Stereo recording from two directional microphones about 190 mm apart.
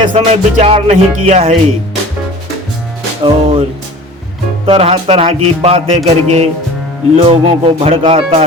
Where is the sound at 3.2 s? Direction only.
25° right (ahead or behind).